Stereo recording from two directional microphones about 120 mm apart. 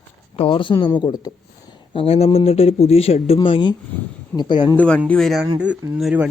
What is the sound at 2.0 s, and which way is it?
Speech, 55° left (ahead or behind).